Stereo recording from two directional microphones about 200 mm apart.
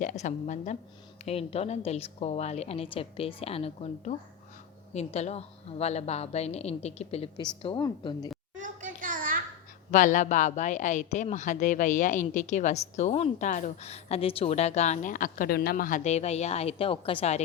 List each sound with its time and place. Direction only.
0.0 s a woman's voice: 40° left (ahead or behind); by 8.3 s 20° left (ahead or behind)
8.5 s a sound: 40° right (ahead or behind)
9.9 s a woman's voice: 40° left (ahead or behind)